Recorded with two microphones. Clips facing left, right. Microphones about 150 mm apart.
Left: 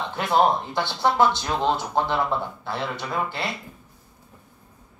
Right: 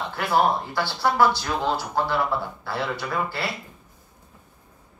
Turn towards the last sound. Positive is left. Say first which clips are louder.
# even
turn(degrees=20)  # may be behind; listen again after turning